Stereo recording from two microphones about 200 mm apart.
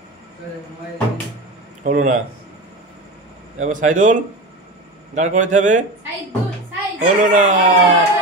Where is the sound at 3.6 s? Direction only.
40° right (ahead or behind).